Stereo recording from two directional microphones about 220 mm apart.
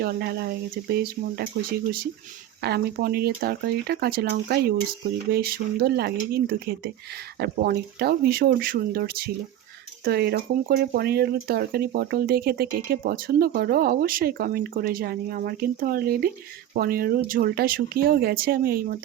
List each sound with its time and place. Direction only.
0.0 s speech: 45° right (ahead or behind)
2.6 s speech: 45° right (ahead or behind)